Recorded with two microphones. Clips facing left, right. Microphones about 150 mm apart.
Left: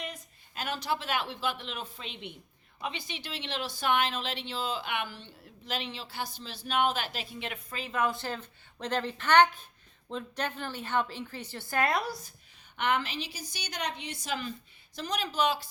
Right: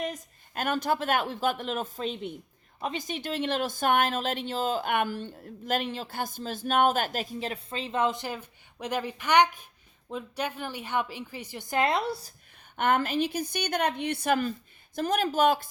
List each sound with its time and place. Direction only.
0.0 s a woman's voice: 50° right (ahead or behind); by 12.3 s 30° right (ahead or behind)
12.7 s speech: 45° right (ahead or behind)